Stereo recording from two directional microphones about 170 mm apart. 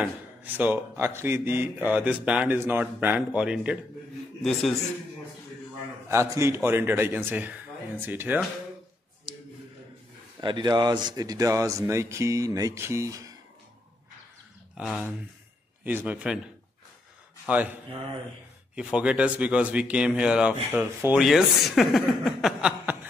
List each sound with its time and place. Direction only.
0.0 s speech: 10° right (ahead or behind)
6.0 s speech: 15° right (ahead or behind)
10.4 s speech: 25° right (ahead or behind)
14.8 s speech: 5° right (ahead or behind)
17.5 s speech: 10° right (ahead or behind)
18.8 s speech: 5° right (ahead or behind)
21.2 s speech: centre (ahead or behind)